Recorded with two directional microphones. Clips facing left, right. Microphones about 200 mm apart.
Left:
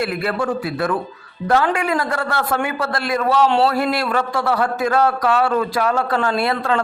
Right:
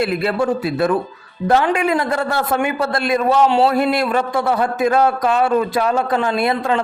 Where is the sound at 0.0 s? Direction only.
20° right (ahead or behind).